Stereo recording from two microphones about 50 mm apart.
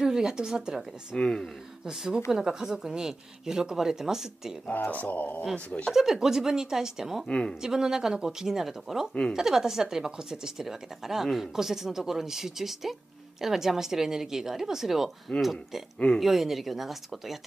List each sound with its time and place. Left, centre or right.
0.0 s speech: centre
1.1 s speech: centre
1.9 s a woman's voice: centre
4.7 s speech: left
5.9 s a woman's voice: centre
7.2 s speech: left
7.6 s a woman's voice: centre